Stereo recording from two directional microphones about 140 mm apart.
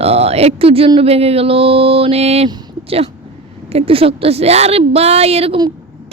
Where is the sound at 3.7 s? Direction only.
45° right (ahead or behind).